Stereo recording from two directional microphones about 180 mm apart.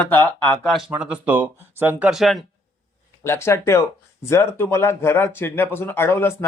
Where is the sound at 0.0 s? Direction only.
10° left (ahead or behind).